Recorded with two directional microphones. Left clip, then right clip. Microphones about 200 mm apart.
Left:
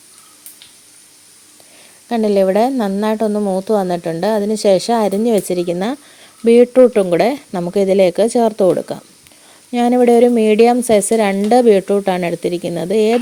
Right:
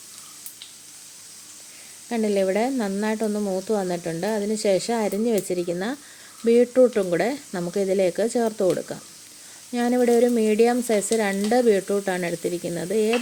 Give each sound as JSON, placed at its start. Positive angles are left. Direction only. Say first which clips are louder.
{"t": 2.0, "sound": "speech", "louder": "left 9 dB", "side_deg": 35}